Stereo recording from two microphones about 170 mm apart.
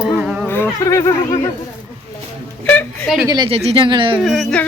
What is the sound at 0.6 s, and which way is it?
Speech, 20° left (ahead or behind).